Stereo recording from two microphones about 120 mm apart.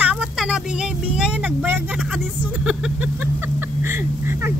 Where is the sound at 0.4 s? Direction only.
5° right (ahead or behind).